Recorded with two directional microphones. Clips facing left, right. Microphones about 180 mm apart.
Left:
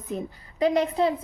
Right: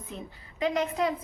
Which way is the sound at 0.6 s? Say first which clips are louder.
Left 5 dB; 35° left (ahead or behind).